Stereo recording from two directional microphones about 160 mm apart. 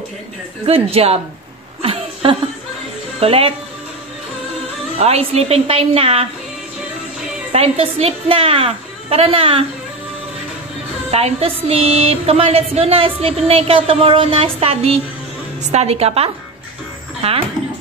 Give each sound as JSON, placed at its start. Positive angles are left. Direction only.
{"t": 0.7, "sound": "speech", "side_deg": -35}
{"t": 1.8, "sound": "a sound", "side_deg": -35}
{"t": 3.2, "sound": "speech", "side_deg": -35}
{"t": 4.9, "sound": "speech", "side_deg": -40}
{"t": 7.5, "sound": "speech", "side_deg": -40}
{"t": 11.1, "sound": "speech", "side_deg": -40}